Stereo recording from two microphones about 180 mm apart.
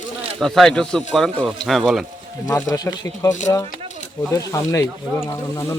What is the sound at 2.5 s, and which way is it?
Speech, 20° left (ahead or behind).